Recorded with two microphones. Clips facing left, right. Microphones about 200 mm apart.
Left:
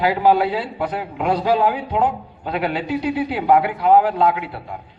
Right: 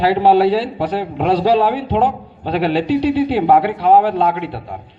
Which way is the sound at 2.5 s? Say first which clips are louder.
Right 6 dB; 30° right (ahead or behind).